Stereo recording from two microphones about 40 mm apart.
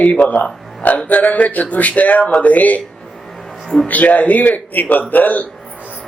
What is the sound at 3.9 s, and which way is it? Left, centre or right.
Speech, left.